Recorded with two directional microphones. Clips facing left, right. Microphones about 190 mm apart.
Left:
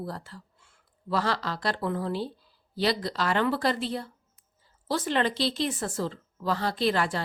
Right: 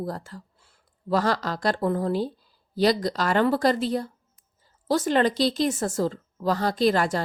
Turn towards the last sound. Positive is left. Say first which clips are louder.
# right 4 dB
turn(degrees=-40)  # may be behind; listen again after turning